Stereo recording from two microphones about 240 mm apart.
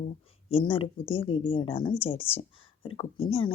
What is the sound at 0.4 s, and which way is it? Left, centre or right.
A woman's voice, left.